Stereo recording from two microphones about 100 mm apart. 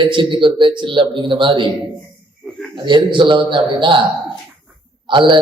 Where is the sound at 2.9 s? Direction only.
55° right (ahead or behind).